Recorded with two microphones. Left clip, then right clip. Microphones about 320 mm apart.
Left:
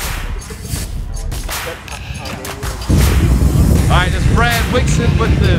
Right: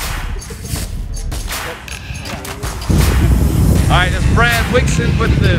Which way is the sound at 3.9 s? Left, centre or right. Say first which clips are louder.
Right 2 dB; centre.